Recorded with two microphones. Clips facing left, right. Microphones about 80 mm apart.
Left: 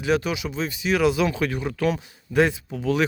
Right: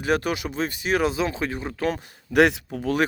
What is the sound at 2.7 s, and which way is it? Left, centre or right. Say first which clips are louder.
Speech: left 1 dB; right.